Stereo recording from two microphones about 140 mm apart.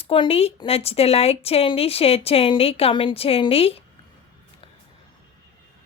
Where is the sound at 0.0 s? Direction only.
40° left (ahead or behind).